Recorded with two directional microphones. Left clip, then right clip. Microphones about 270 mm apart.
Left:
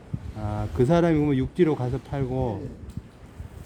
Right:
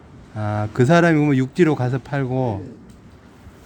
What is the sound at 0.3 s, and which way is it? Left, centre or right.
A man's voice, centre.